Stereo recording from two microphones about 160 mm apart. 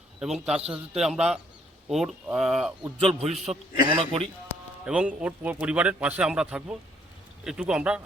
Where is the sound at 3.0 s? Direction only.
40° right (ahead or behind).